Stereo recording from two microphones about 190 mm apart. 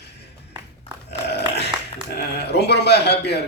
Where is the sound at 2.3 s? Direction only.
60° left (ahead or behind).